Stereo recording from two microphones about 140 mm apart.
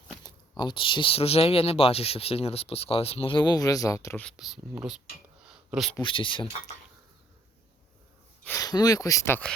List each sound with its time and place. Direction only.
0.2 s speech: 30° left (ahead or behind)
4.2 s speech: centre (ahead or behind)
6.0 s speech: 35° left (ahead or behind)
8.4 s speech: 25° left (ahead or behind)